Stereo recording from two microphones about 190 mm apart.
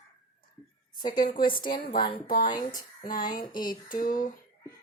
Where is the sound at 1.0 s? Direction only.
20° left (ahead or behind).